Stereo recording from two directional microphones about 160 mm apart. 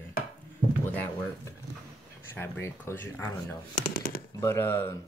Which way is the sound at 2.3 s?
15° left (ahead or behind).